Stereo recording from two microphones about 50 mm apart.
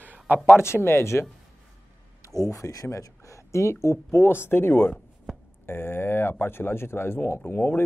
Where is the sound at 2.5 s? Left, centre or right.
Left.